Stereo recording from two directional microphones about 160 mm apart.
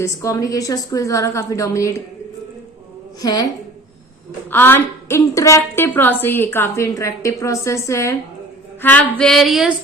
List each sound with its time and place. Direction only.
0.0 s a woman's voice: 20° left (ahead or behind)
3.2 s a woman's voice: 25° left (ahead or behind)
4.5 s a woman's voice: 15° left (ahead or behind)
8.8 s female singing: 10° left (ahead or behind)